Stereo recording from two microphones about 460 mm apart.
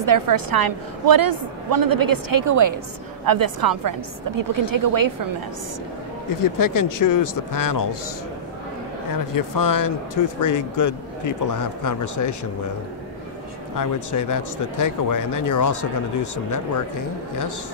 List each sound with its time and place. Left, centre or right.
0.0 s a woman's voice: right
6.4 s speech: left
9.3 s speech: left
13.7 s speech: left